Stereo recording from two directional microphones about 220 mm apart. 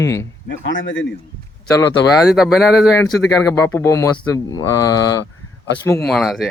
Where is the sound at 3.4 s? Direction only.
10° left (ahead or behind).